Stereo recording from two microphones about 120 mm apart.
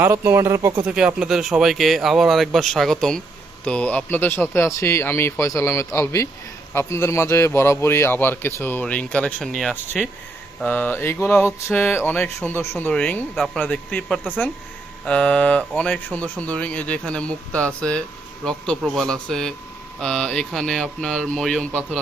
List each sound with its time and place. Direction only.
0.0 s speech: 20° right (ahead or behind)
0.9 s a man's voice: 5° right (ahead or behind)
10.6 s speech: 15° left (ahead or behind)
13.3 s speech: centre (ahead or behind)
13.6 s speech: 10° left (ahead or behind)